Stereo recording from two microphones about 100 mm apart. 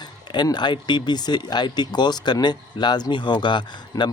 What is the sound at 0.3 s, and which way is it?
Speech, 45° left (ahead or behind).